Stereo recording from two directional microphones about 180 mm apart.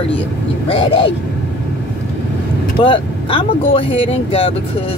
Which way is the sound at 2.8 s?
30° left (ahead or behind).